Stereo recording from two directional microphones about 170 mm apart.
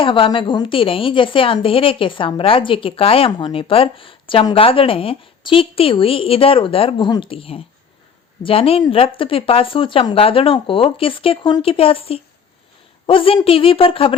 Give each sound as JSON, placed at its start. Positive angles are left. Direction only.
{"t": 0.0, "sound": "a woman's voice", "side_deg": 30}